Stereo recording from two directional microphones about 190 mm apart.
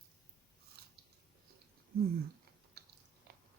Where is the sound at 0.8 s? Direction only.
55° right (ahead or behind).